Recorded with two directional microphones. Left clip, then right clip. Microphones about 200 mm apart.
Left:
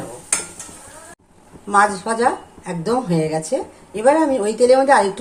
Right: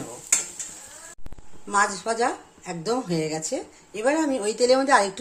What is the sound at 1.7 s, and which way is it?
Speech, 20° right (ahead or behind).